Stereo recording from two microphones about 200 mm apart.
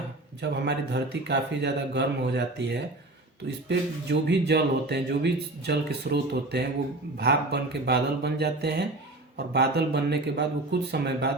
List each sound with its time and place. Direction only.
0.4 s speech: 60° right (ahead or behind)